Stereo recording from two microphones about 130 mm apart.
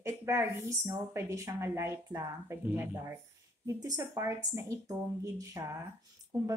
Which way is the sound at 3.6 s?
25° right (ahead or behind).